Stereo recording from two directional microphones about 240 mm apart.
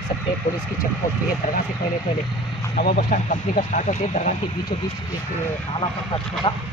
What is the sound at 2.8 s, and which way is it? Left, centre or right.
Speech, left.